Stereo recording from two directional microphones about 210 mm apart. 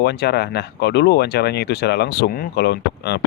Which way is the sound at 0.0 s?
50° left (ahead or behind).